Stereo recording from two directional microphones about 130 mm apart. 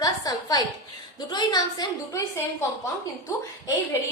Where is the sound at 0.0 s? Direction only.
30° left (ahead or behind).